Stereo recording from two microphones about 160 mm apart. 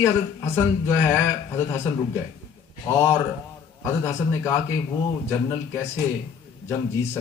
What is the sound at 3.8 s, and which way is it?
Speech, 20° left (ahead or behind).